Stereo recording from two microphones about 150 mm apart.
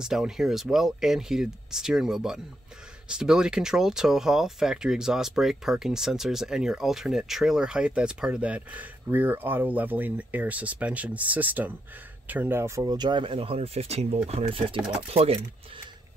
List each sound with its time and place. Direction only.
0.0 s speech: 5° right (ahead or behind); by 15.4 s 40° right (ahead or behind)